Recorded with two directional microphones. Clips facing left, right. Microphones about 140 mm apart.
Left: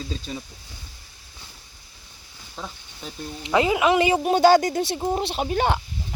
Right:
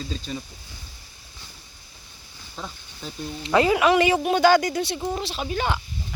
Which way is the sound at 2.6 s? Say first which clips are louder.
Even; 5° left (ahead or behind).